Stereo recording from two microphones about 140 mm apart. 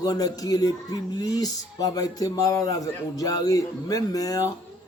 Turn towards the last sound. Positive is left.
turn(degrees=25)  # may be behind; listen again after turning